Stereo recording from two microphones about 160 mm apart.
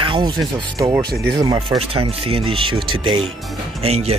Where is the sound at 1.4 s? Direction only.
25° right (ahead or behind).